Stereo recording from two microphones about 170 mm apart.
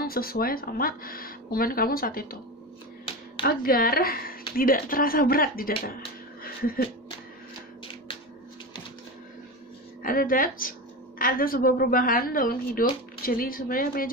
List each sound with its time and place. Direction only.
0.0 s speech: 60° left (ahead or behind)
3.4 s speech: 60° left (ahead or behind)
6.4 s a sound: 60° left (ahead or behind)
10.0 s speech: 55° left (ahead or behind)